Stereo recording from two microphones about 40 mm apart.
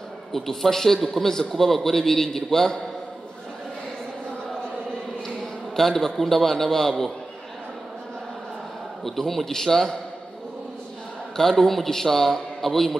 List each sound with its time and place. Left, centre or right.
0.3 s a man's voice: centre
5.8 s a man's voice: centre
9.0 s a man's voice: centre
11.3 s a man's voice: centre